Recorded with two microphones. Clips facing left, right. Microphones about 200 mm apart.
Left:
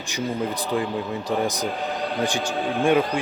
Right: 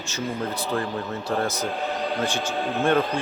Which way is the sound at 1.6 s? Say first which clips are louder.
Even; centre (ahead or behind).